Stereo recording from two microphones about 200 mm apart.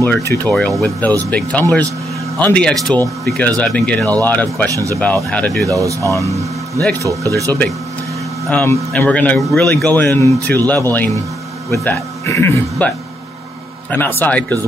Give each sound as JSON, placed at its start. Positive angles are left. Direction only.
{"t": 0.0, "sound": "speech", "side_deg": 10}
{"t": 4.6, "sound": "speech", "side_deg": -15}
{"t": 5.0, "sound": "speech", "side_deg": 5}
{"t": 5.7, "sound": "speech", "side_deg": -15}
{"t": 7.0, "sound": "speech", "side_deg": -15}
{"t": 7.4, "sound": "speech", "side_deg": 5}
{"t": 13.9, "sound": "speech", "side_deg": 10}